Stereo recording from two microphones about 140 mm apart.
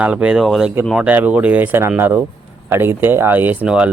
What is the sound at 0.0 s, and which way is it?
Speech, 10° right (ahead or behind).